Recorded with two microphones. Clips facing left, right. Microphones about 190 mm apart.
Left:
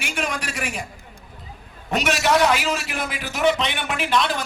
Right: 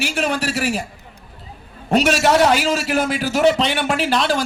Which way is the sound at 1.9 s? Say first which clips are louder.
Right 5 dB; 30° right (ahead or behind).